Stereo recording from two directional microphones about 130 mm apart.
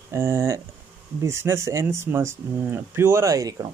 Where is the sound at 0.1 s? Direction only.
20° right (ahead or behind).